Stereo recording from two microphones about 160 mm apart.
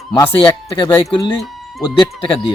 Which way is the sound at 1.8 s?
30° left (ahead or behind).